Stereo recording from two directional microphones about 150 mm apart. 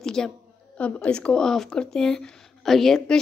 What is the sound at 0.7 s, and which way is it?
Speech, 10° left (ahead or behind).